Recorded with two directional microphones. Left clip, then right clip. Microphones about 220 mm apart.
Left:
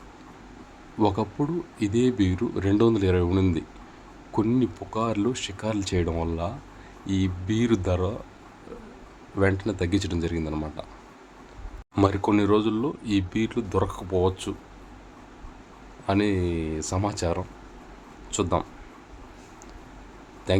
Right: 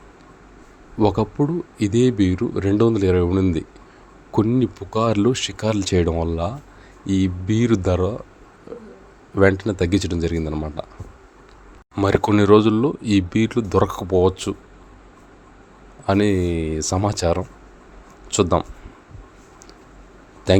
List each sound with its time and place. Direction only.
0.9 s speech: 20° right (ahead or behind)
9.3 s speech: 25° right (ahead or behind)
12.1 s speech: 30° right (ahead or behind)
16.0 s speech: 25° right (ahead or behind)
20.5 s speech: 30° right (ahead or behind)